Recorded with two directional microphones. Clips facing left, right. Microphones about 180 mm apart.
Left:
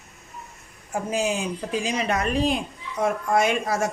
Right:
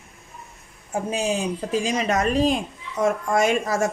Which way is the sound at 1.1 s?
30° right (ahead or behind).